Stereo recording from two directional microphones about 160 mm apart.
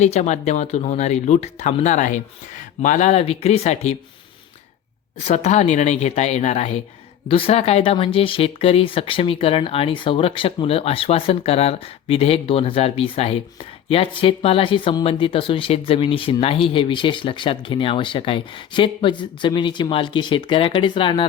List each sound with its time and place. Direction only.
0.0 s speech: 45° left (ahead or behind)
5.2 s speech: 45° left (ahead or behind)